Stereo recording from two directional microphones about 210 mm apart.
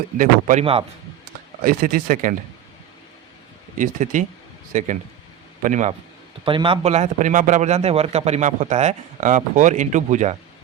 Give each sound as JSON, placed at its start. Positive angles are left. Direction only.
{"t": 0.2, "sound": "a man's voice", "side_deg": -40}
{"t": 0.6, "sound": "speech", "side_deg": -25}
{"t": 1.6, "sound": "speech", "side_deg": -45}
{"t": 3.8, "sound": "a man's voice", "side_deg": -35}
{"t": 6.4, "sound": "a man's voice", "side_deg": -25}